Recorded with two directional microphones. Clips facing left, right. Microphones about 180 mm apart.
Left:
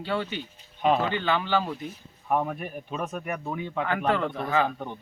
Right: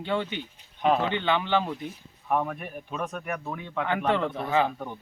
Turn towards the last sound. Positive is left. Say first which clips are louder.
# right 1 dB
turn(degrees=-15)  # may be behind; listen again after turning